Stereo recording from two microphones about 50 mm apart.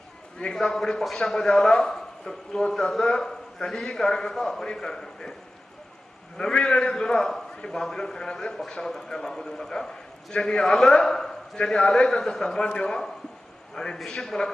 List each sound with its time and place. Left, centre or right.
0.3 s a man's voice: centre
6.3 s a man's voice: centre